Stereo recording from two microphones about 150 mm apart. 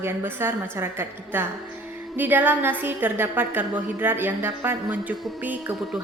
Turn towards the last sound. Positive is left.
turn(degrees=-10)  # may be behind; listen again after turning